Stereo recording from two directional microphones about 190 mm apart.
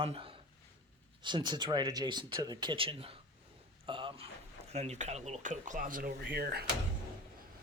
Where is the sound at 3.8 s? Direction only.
25° right (ahead or behind).